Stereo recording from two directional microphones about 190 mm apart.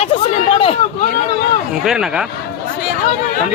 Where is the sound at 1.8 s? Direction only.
5° right (ahead or behind).